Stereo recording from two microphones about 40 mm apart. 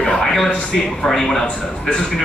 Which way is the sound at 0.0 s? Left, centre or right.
Left.